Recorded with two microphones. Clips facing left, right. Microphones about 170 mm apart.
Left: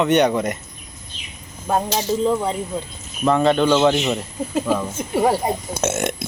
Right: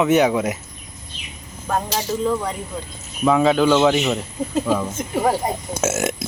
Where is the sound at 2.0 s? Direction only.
20° left (ahead or behind).